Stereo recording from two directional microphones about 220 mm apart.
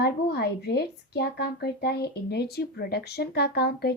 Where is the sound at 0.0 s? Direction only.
45° left (ahead or behind).